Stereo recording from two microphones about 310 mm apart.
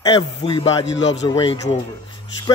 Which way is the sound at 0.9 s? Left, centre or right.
Left.